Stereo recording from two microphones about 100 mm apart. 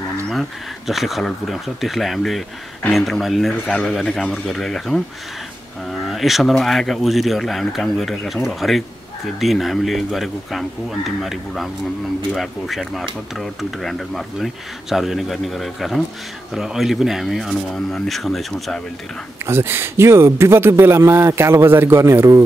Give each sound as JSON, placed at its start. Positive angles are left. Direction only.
{"t": 0.3, "sound": "speech", "side_deg": 0}
{"t": 19.4, "sound": "speech", "side_deg": -25}